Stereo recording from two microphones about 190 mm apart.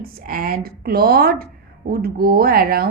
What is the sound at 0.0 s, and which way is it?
A woman's voice, 50° right (ahead or behind).